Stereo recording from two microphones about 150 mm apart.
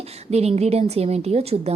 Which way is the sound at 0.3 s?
45° right (ahead or behind).